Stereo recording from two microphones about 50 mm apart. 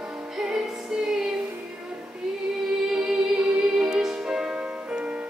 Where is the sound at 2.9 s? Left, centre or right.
Centre.